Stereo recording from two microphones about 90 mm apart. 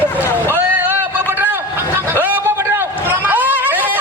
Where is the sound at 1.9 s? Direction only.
25° right (ahead or behind).